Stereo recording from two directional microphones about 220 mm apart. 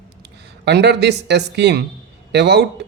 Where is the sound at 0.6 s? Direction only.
50° right (ahead or behind).